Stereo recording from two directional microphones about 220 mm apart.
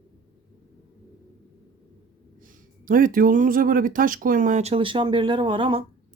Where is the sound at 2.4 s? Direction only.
35° right (ahead or behind).